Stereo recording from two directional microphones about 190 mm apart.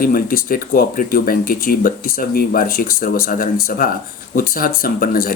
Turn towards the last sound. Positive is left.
turn(degrees=50)  # may be behind; listen again after turning